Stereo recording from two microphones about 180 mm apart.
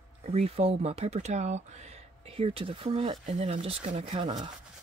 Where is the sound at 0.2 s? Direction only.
35° right (ahead or behind).